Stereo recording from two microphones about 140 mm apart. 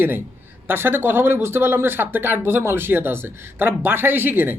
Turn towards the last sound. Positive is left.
turn(degrees=-15)  # may be behind; listen again after turning